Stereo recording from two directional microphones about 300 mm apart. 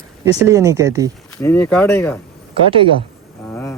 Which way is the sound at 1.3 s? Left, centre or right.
Centre.